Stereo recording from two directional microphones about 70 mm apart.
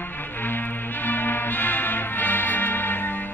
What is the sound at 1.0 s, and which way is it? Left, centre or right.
Music, left.